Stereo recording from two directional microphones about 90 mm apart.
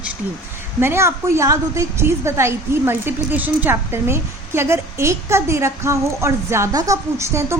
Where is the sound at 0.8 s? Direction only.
30° right (ahead or behind).